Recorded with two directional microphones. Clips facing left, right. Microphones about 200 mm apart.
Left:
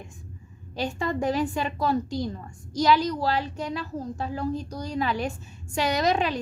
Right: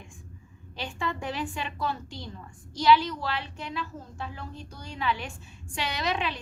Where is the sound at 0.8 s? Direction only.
40° left (ahead or behind).